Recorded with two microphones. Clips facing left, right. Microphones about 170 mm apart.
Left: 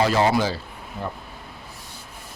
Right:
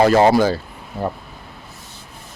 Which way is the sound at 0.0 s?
50° right (ahead or behind).